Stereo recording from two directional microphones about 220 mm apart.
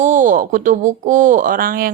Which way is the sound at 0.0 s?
35° right (ahead or behind).